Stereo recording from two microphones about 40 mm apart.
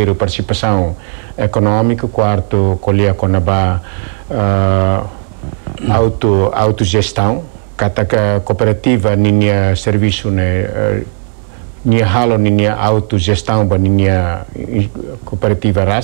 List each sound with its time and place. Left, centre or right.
0.0 s speech: centre
0.7 s speech: centre
7.7 s a sound: centre
8.1 s speech: centre